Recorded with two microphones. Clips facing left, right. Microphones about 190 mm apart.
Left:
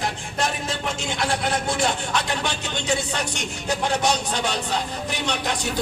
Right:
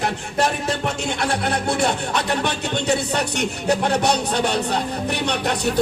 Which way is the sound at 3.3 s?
60° right (ahead or behind).